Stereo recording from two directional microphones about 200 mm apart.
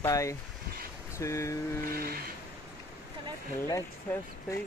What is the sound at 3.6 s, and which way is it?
Speech, 15° left (ahead or behind).